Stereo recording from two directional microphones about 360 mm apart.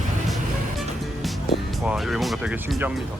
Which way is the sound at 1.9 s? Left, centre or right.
Centre.